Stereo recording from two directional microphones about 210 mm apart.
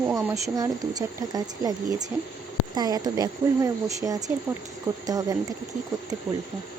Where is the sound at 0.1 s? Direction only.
10° right (ahead or behind).